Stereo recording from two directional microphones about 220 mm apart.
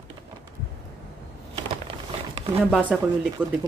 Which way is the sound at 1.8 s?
25° right (ahead or behind).